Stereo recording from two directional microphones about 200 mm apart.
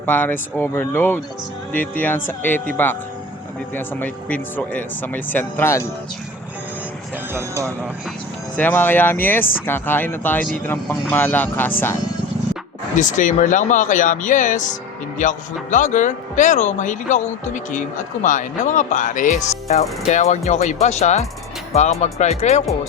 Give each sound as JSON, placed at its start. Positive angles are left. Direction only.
{"t": 0.0, "sound": "speech", "side_deg": 10}
{"t": 7.3, "sound": "speech", "side_deg": -15}
{"t": 8.5, "sound": "speech", "side_deg": 10}
{"t": 13.0, "sound": "speech", "side_deg": 40}